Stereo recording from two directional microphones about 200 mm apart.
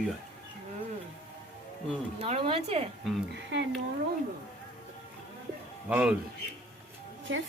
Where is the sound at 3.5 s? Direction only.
60° right (ahead or behind).